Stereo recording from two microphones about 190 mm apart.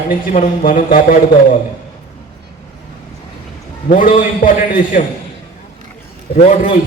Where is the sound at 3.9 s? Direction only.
45° left (ahead or behind).